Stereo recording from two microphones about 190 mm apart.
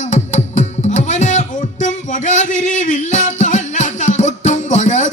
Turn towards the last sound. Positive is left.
turn(degrees=40)  # may be behind; listen again after turning